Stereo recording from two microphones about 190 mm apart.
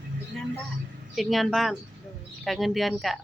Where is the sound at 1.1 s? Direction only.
Centre (ahead or behind).